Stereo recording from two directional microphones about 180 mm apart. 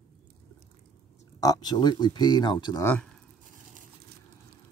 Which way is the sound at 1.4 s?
20° left (ahead or behind).